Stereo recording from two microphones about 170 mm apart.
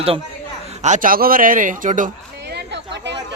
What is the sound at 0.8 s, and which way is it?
A man's voice, 45° right (ahead or behind).